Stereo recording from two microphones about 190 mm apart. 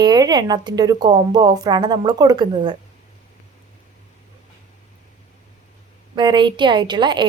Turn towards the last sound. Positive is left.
turn(degrees=-25)  # may be behind; listen again after turning